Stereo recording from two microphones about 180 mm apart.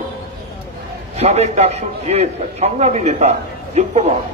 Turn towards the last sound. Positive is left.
turn(degrees=-40)  # may be behind; listen again after turning